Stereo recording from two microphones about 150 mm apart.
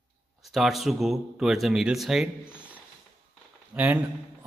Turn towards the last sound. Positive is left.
turn(degrees=-10)  # may be behind; listen again after turning